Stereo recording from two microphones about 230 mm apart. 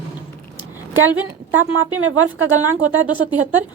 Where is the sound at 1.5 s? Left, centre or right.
Right.